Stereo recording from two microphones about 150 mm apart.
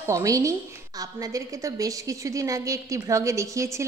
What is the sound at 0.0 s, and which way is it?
A woman's voice, 20° right (ahead or behind).